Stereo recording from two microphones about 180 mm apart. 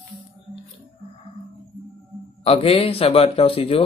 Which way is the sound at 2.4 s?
30° left (ahead or behind).